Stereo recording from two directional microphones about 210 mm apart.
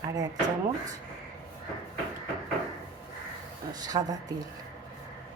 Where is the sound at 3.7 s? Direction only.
20° right (ahead or behind).